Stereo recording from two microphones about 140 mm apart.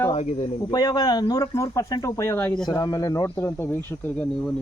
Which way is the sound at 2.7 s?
30° left (ahead or behind).